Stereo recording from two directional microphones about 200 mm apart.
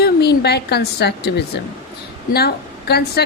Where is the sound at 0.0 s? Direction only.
55° left (ahead or behind).